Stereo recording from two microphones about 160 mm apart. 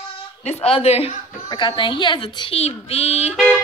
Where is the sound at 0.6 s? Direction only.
40° left (ahead or behind).